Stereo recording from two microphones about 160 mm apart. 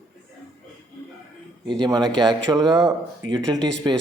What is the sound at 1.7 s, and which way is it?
Speech, 25° right (ahead or behind).